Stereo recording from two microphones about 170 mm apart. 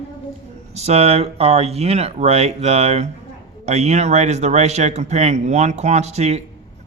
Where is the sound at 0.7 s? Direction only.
40° right (ahead or behind).